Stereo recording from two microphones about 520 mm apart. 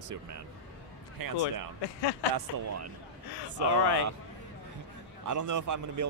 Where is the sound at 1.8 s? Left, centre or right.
Left.